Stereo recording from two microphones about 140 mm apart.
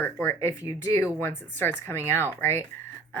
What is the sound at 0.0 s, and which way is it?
Speech, 15° left (ahead or behind).